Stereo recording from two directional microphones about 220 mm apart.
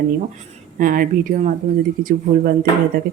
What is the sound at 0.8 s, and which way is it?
Speech, 40° right (ahead or behind).